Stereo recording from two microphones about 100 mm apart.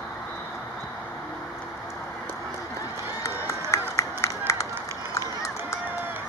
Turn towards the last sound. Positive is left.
turn(degrees=30)  # may be behind; listen again after turning